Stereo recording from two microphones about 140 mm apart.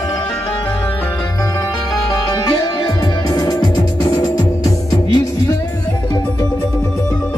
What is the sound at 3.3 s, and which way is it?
Music, 30° left (ahead or behind).